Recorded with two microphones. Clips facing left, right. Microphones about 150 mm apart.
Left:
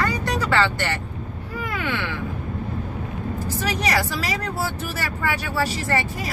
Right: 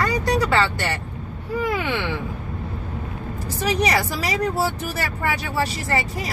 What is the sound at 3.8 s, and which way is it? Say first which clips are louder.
Speech: right 1 dB; 20° right (ahead or behind).